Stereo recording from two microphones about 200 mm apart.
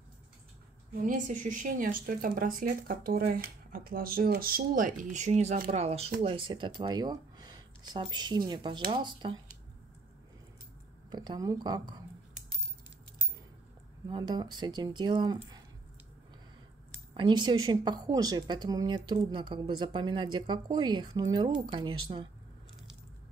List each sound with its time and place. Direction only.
1.0 s speech: 40° right (ahead or behind); by 9.4 s 25° right (ahead or behind)
11.1 s speech: 20° right (ahead or behind)
14.0 s speech: 20° right (ahead or behind)
17.1 s speech: 25° right (ahead or behind)